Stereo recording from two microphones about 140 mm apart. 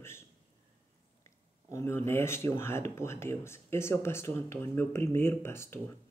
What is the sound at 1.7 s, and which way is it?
Speech, 20° left (ahead or behind).